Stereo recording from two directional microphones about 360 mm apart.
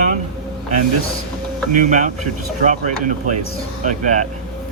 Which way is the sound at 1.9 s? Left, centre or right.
Centre.